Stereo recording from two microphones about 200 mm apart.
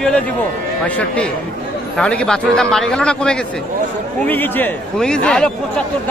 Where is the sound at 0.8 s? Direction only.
5° left (ahead or behind).